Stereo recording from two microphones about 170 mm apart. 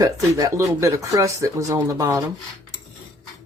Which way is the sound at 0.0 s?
20° right (ahead or behind).